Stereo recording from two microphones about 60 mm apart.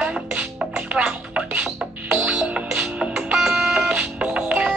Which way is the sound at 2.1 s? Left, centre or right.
Centre.